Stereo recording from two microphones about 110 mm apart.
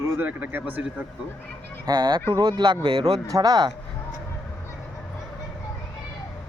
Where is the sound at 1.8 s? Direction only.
40° right (ahead or behind).